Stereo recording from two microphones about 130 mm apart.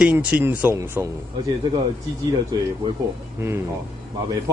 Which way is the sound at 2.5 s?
30° right (ahead or behind).